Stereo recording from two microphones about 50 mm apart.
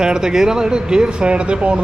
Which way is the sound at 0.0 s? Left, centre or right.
Centre.